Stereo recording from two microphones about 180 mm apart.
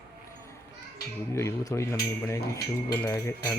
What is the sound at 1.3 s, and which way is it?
Speech, 15° left (ahead or behind).